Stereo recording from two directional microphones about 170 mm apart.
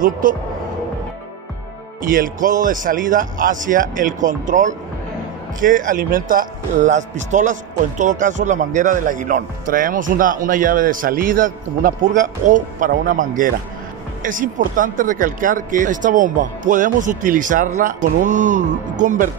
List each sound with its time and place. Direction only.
0.0 s speech: 55° right (ahead or behind)
2.0 s speech: 55° right (ahead or behind)